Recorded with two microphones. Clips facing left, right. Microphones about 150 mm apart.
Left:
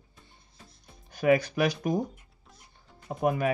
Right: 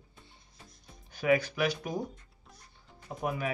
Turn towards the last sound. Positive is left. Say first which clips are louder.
# left 7 dB
turn(degrees=45)  # may be behind; listen again after turning